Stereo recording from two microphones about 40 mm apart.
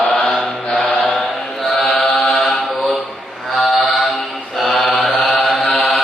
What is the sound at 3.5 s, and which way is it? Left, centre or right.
Mantra, centre.